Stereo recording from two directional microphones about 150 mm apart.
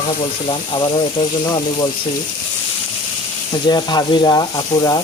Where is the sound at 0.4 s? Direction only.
35° left (ahead or behind).